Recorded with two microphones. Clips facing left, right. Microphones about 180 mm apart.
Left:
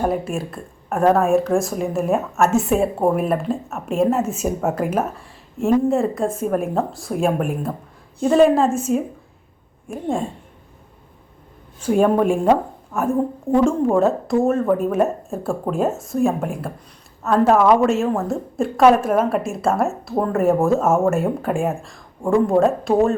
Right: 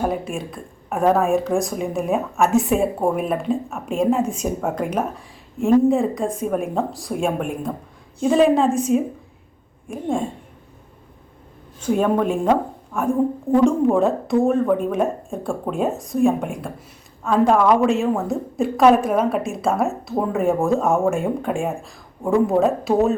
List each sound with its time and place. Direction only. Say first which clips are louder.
0.0 s a woman's voice: left 2 dB; centre (ahead or behind)
11.8 s a woman's voice: left 3 dB; 10° left (ahead or behind)